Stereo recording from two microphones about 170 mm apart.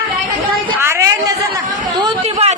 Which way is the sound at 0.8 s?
15° right (ahead or behind).